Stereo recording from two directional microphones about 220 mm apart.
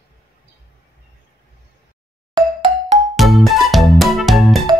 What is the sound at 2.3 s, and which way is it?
Music, 25° right (ahead or behind).